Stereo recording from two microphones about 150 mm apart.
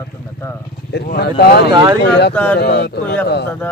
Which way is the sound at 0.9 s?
90° left.